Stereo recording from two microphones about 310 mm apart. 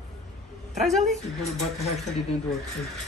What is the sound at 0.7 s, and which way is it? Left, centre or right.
Speech, centre.